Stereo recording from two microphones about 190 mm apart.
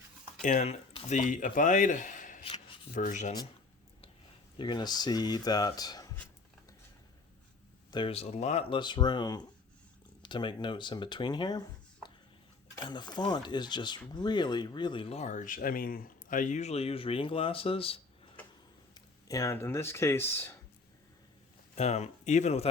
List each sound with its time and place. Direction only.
0.4 s speech: 35° left (ahead or behind)
2.4 s shuffling cards: 30° left (ahead or behind)
2.9 s speech: 40° left (ahead or behind)
4.5 s speech: 25° left (ahead or behind)
7.9 s speech: 25° left (ahead or behind)
12.8 s speech: 20° left (ahead or behind)
18.9 s speech: 20° left (ahead or behind)
21.8 s speech: 35° left (ahead or behind)